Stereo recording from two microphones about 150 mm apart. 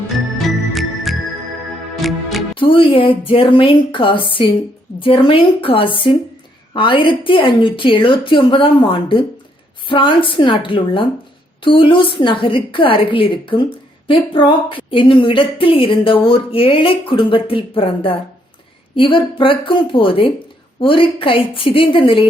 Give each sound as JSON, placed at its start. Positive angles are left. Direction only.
{"t": 0.4, "sound": "music", "side_deg": 0}
{"t": 2.6, "sound": "a woman's voice", "side_deg": 35}